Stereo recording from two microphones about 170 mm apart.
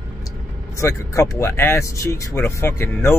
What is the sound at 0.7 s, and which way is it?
Speech, 15° left (ahead or behind).